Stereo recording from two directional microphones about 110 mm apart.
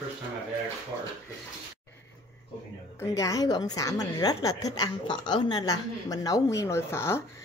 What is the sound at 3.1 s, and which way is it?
A woman's voice, 30° left (ahead or behind).